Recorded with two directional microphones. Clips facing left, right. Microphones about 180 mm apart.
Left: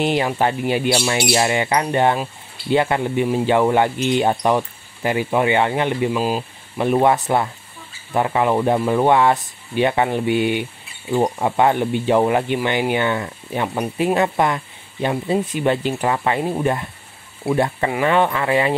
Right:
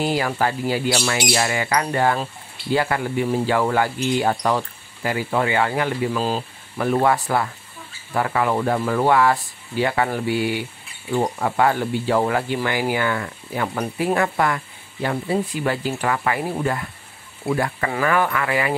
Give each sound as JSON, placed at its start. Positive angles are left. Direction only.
{"t": 0.0, "sound": "speech", "side_deg": 20}